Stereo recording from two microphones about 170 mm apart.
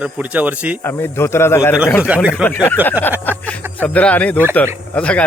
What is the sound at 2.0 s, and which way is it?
Speech, 10° right (ahead or behind).